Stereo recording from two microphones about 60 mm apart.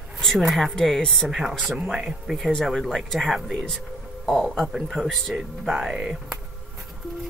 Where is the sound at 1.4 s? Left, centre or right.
Centre.